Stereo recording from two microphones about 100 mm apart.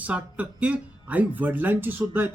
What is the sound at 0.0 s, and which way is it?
Speech, 15° right (ahead or behind).